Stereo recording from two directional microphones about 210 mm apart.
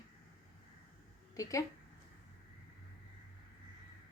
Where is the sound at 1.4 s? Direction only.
15° left (ahead or behind).